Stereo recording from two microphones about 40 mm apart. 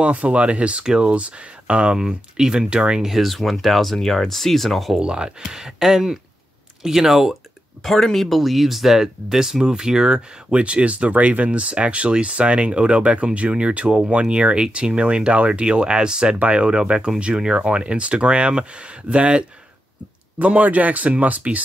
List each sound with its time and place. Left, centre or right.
0.0 s speech: right
2.0 s speech: centre
3.0 s speech: centre
4.9 s speech: right
7.8 s speech: centre; by 16.3 s right
16.3 s speech: right
20.3 s speech: right